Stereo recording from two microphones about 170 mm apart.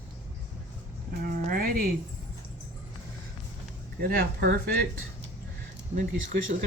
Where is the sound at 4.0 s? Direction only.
60° right (ahead or behind).